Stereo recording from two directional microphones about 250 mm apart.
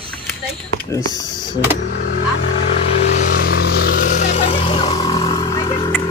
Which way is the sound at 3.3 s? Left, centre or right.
Left.